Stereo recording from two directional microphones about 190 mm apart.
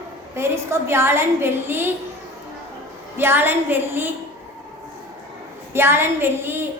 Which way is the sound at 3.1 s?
10° right (ahead or behind).